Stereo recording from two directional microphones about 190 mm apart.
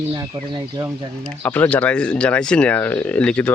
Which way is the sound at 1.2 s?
5° left (ahead or behind).